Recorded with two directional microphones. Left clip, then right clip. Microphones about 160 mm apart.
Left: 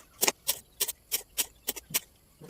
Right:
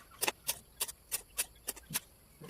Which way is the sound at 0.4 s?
50° left (ahead or behind).